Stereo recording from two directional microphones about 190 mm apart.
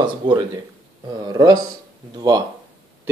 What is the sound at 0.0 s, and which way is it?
Speech, 25° right (ahead or behind).